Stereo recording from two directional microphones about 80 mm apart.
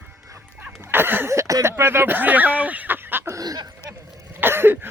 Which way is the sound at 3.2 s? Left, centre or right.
Right.